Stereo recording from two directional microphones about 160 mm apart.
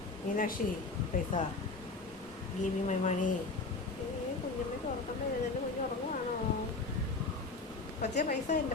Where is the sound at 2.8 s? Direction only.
45° left (ahead or behind).